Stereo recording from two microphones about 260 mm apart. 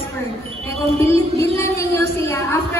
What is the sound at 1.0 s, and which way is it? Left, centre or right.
A woman's voice, centre.